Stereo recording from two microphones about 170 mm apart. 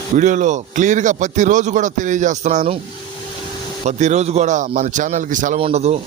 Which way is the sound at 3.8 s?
45° right (ahead or behind).